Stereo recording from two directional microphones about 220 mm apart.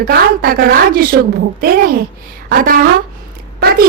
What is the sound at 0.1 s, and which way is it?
A woman's voice, 45° right (ahead or behind).